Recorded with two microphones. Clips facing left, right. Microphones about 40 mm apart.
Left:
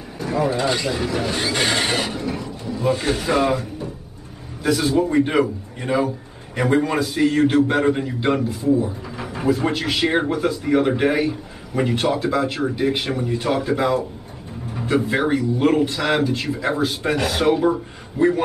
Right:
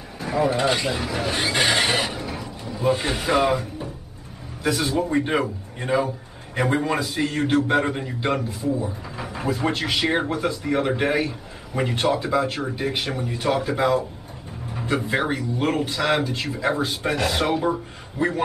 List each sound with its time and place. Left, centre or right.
0.2 s a man's voice: centre